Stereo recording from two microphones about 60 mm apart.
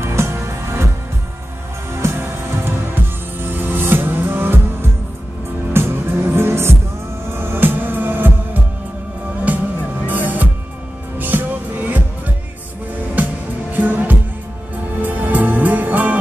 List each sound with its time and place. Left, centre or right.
0.0 s music: right
2.0 s music: right
5.7 s music: right
9.5 s music: right
13.1 s music: right